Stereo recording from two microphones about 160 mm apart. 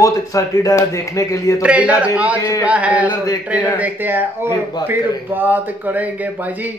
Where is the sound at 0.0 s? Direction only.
20° left (ahead or behind).